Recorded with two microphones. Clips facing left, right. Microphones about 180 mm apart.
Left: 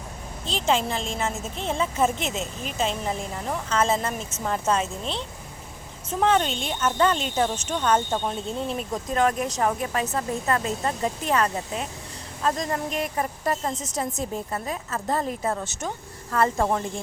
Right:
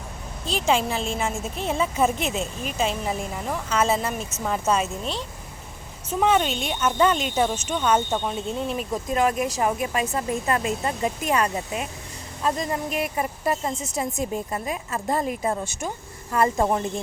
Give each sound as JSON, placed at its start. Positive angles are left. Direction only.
{"t": 0.6, "sound": "speech", "side_deg": -10}
{"t": 2.1, "sound": "speech", "side_deg": 20}
{"t": 2.6, "sound": "speech", "side_deg": -10}